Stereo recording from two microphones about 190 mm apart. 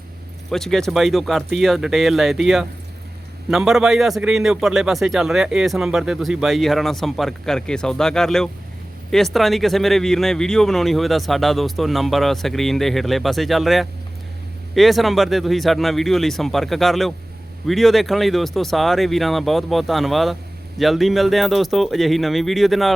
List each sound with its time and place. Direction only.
0.5 s a man's voice: centre (ahead or behind)